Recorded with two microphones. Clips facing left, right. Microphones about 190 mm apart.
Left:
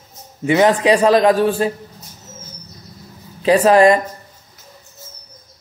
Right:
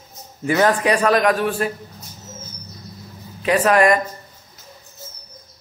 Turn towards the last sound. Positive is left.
turn(degrees=30)  # may be behind; listen again after turning